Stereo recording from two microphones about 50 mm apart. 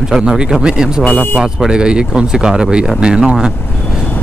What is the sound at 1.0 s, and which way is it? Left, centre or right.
Speech, left.